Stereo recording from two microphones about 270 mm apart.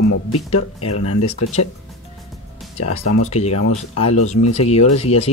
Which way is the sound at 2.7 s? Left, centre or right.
Left.